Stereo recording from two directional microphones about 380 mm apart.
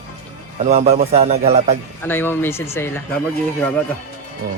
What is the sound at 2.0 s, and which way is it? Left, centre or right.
A man's voice, centre.